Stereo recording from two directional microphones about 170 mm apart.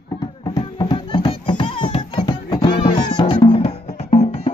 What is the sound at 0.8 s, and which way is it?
Music, 25° left (ahead or behind).